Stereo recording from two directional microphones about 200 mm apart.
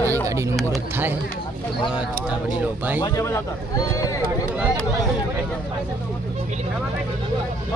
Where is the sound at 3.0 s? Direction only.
15° left (ahead or behind).